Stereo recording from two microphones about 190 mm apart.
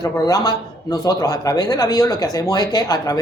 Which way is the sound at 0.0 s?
20° left (ahead or behind).